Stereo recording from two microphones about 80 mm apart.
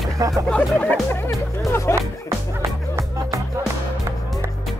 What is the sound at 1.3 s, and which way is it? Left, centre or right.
Music, left.